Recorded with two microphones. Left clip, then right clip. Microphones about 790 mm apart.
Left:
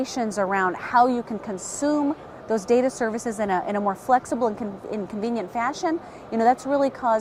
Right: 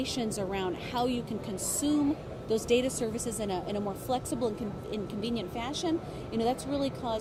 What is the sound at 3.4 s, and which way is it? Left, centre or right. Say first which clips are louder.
A woman's voice: left 11 dB; left.